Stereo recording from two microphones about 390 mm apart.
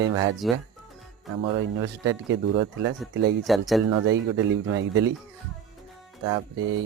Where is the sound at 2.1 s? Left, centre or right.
Right.